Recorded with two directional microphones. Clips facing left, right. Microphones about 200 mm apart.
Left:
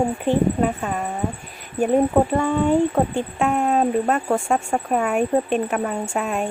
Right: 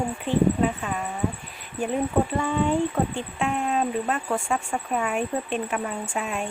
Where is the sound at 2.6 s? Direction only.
50° left (ahead or behind).